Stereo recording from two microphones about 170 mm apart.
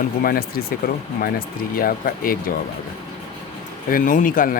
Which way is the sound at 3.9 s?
50° left (ahead or behind).